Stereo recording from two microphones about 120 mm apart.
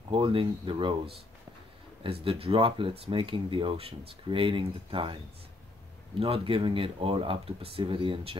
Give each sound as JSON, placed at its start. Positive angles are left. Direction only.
{"t": 0.1, "sound": "speech", "side_deg": -50}
{"t": 2.0, "sound": "speech", "side_deg": -50}